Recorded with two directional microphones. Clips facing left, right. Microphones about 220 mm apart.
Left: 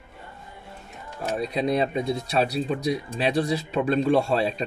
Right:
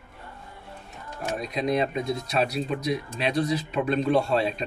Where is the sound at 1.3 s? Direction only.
30° left (ahead or behind).